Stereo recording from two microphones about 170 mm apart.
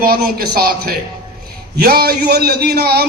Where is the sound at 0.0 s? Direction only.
60° right (ahead or behind).